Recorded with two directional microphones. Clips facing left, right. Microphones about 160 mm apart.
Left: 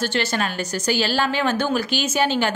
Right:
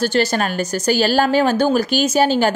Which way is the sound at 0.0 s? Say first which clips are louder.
Right 6 dB; 40° right (ahead or behind).